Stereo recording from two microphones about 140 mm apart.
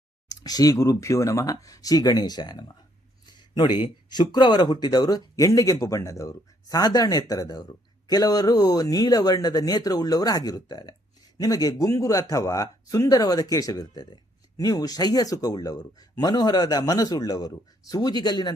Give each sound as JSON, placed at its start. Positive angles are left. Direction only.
{"t": 0.3, "sound": "speech", "side_deg": 25}
{"t": 3.2, "sound": "a sound", "side_deg": 30}
{"t": 3.8, "sound": "speech", "side_deg": 30}